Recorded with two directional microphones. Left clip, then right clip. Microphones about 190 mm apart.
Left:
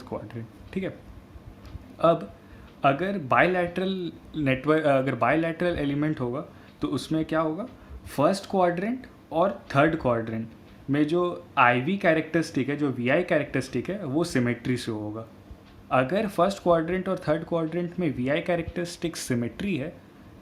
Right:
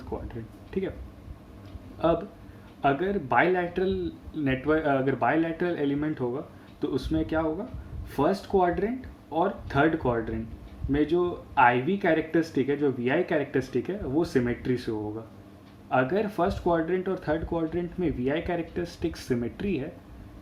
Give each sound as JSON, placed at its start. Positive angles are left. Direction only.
{"t": 0.1, "sound": "a sound", "side_deg": 40}
{"t": 0.7, "sound": "speech", "side_deg": 40}
{"t": 2.0, "sound": "speech", "side_deg": 45}